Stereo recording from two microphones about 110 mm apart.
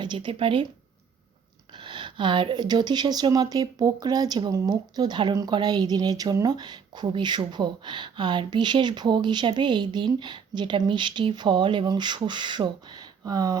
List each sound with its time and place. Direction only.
0.0 s speech: 45° right (ahead or behind)
1.8 s speech: 50° right (ahead or behind)